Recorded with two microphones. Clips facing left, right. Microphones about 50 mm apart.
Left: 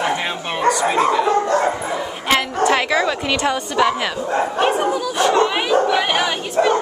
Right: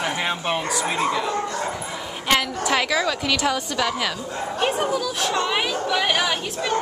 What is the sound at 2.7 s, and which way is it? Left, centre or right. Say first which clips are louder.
A woman's voice: left 2 dB; centre.